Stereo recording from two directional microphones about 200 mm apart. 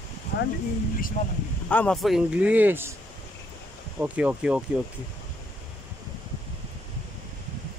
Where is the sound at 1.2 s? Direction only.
40° left (ahead or behind).